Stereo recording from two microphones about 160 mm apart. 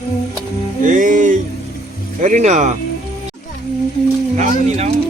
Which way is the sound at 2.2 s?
45° right (ahead or behind).